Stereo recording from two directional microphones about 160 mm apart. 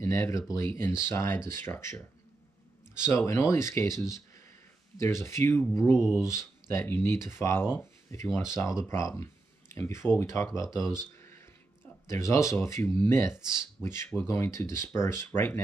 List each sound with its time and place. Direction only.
0.0 s speech: 20° left (ahead or behind)
3.1 s speech: 15° left (ahead or behind)
5.9 s speech: centre (ahead or behind)
6.2 s speech: 20° left (ahead or behind)
11.1 s a sound: 15° left (ahead or behind)
12.1 s speech: 20° left (ahead or behind)